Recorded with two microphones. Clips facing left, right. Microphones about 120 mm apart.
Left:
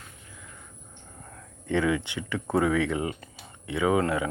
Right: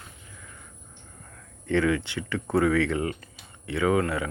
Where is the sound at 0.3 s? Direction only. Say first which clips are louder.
Left 1 dB; 5° left (ahead or behind).